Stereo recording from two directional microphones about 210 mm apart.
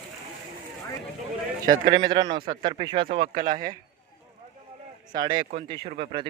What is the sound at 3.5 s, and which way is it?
Speech, 40° right (ahead or behind).